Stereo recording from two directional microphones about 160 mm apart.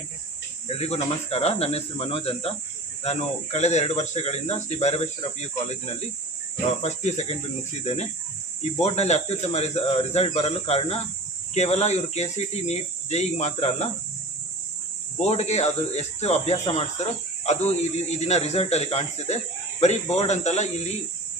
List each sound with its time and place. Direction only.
0.7 s cricket: 40° left (ahead or behind)
1.3 s speech: 40° left (ahead or behind)
8.8 s speech: 45° left (ahead or behind)
15.2 s speech: 40° left (ahead or behind)